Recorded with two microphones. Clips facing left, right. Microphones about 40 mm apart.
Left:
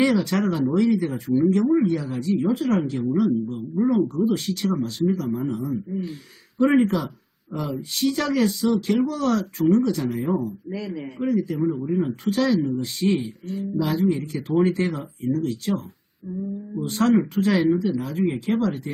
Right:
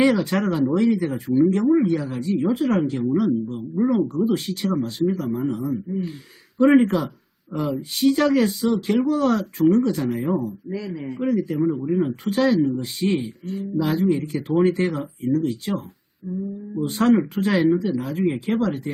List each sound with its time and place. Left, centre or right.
0.0 s speech: centre
11.2 s speech: centre
16.7 s speech: centre